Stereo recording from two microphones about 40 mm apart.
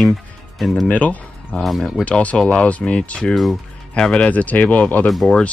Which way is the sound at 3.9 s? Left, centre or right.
Left.